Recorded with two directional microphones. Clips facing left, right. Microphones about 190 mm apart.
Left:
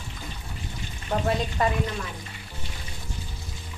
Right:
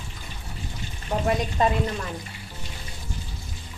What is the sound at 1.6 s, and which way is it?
Frying, 25° right (ahead or behind).